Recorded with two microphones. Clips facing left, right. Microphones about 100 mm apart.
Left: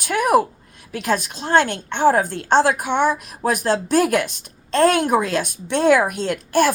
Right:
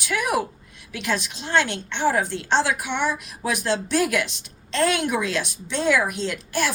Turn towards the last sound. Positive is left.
turn(degrees=50)  # may be behind; listen again after turning